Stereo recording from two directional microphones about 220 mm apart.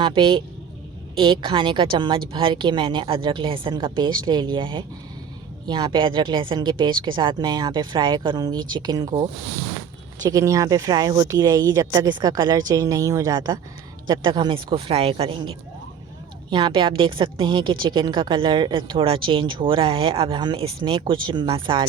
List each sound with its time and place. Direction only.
0.0 s a woman's voice: 20° right (ahead or behind)